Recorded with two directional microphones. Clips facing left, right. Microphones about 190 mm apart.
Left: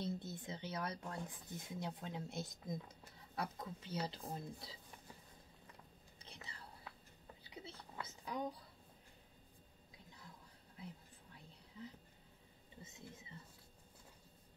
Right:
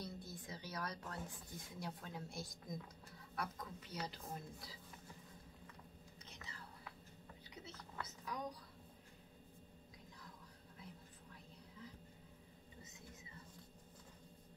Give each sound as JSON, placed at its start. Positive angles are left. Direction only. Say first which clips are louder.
{"t": 0.0, "sound": "speech", "louder": "left 6 dB", "side_deg": 25}
{"t": 6.2, "sound": "whispering", "louder": "left 2 dB", "side_deg": 30}